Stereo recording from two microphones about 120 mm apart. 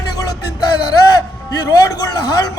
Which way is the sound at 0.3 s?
35° left (ahead or behind).